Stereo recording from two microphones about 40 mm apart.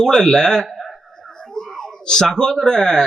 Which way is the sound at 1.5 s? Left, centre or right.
Centre.